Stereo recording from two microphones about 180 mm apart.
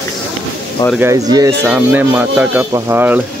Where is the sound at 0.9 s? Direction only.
15° right (ahead or behind).